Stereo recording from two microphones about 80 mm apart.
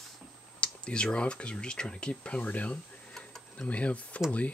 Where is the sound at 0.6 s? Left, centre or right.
Centre.